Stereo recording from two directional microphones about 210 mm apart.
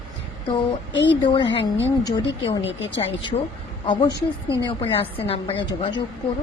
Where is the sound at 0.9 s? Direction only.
60° left (ahead or behind).